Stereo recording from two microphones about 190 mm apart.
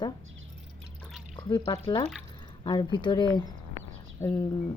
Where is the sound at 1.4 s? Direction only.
25° left (ahead or behind).